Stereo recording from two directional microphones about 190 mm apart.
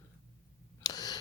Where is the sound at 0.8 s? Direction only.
20° left (ahead or behind).